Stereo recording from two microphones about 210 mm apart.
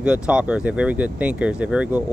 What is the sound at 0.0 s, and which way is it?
Speech, 5° right (ahead or behind).